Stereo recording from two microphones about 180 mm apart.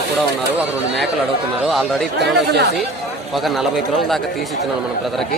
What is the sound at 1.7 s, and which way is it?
Speech, centre (ahead or behind).